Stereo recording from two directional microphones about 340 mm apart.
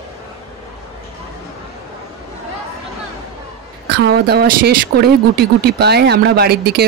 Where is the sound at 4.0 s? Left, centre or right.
Right.